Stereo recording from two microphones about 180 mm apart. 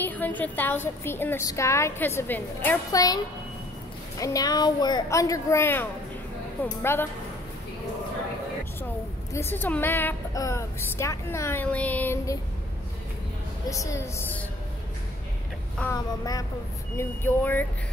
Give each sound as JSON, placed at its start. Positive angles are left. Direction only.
{"t": 0.0, "sound": "a woman's voice", "side_deg": 10}
{"t": 4.2, "sound": "a woman's voice", "side_deg": 20}
{"t": 9.3, "sound": "a woman's voice", "side_deg": 10}
{"t": 13.7, "sound": "a woman's voice", "side_deg": 15}
{"t": 15.8, "sound": "a woman's voice", "side_deg": 15}